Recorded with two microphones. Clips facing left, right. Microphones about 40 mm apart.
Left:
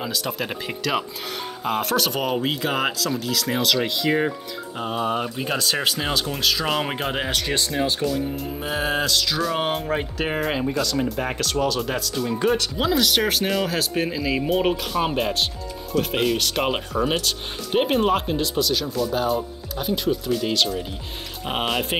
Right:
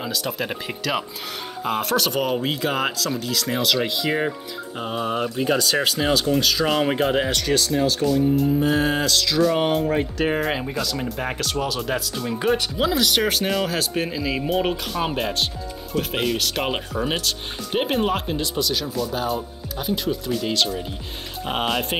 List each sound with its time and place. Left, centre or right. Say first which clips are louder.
0.0 s speech: even; centre
7.4 s speech: right 3 dB; left
8.0 s speech: right 6 dB; centre